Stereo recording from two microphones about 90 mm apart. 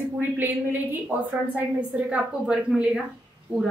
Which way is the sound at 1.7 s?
15° right (ahead or behind).